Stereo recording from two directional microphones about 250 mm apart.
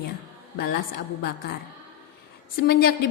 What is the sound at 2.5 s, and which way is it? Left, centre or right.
Speech, left.